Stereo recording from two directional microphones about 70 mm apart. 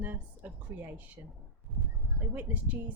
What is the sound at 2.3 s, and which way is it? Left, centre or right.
Speech, right.